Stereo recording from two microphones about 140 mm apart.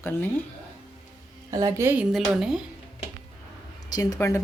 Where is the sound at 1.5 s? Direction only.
25° right (ahead or behind); by 2.6 s centre (ahead or behind).